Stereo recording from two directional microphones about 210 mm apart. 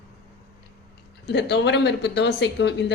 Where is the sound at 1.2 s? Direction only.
55° left (ahead or behind).